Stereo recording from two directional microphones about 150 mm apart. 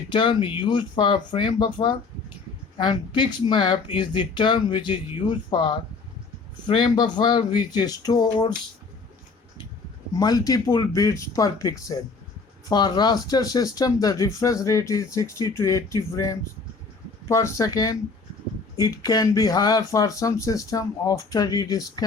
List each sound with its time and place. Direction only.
0.1 s speech: 35° left (ahead or behind)
10.2 s speech: 25° left (ahead or behind)